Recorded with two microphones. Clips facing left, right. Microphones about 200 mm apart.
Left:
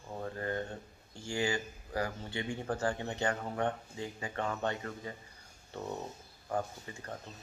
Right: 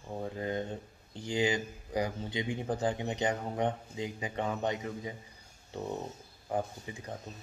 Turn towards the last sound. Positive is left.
turn(degrees=-15)  # may be behind; listen again after turning